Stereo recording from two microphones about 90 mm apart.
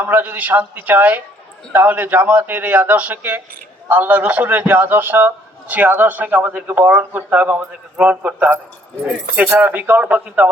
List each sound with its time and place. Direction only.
0.0 s a man's voice: 20° right (ahead or behind)